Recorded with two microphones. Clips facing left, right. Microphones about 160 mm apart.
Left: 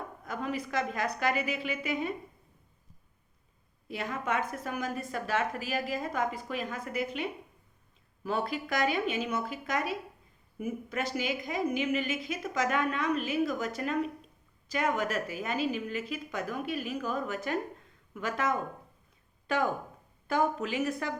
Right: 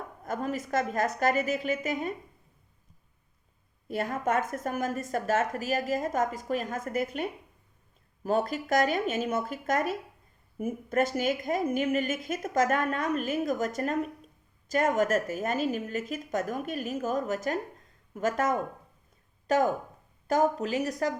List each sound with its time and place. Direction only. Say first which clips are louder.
0.3 s speech: right 4 dB; 45° right (ahead or behind)
3.8 s speech: right 5 dB; 50° right (ahead or behind)